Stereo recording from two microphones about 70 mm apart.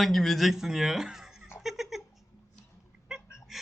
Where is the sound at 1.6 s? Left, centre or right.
Centre.